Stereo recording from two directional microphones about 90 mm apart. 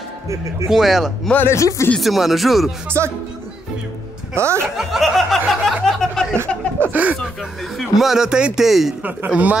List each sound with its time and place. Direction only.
0.7 s a man's voice: 5° right (ahead or behind)
1.3 s speech: 25° left (ahead or behind)
2.0 s a man's voice: centre (ahead or behind)
2.9 s speech: 30° right (ahead or behind)
4.4 s speech: 30° right (ahead or behind)
4.7 s a sound: centre (ahead or behind)
6.8 s chuckle: 20° right (ahead or behind)
7.7 s a man's voice: centre (ahead or behind)
9.0 s speech: 15° right (ahead or behind)